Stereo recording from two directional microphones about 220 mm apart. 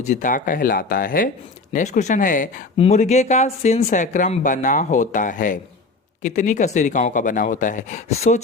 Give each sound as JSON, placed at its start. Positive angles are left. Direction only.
{"t": 0.1, "sound": "speech", "side_deg": 35}